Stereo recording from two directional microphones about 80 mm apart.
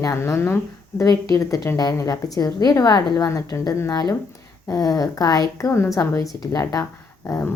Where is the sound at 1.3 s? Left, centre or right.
Left.